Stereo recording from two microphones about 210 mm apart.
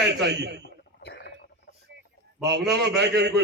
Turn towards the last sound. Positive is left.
turn(degrees=-55)  # may be behind; listen again after turning